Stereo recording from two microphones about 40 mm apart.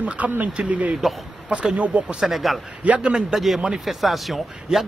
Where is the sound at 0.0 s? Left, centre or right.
Right; by 2.3 s centre.